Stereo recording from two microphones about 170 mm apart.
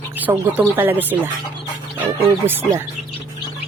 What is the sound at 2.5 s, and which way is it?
Speech, 10° right (ahead or behind).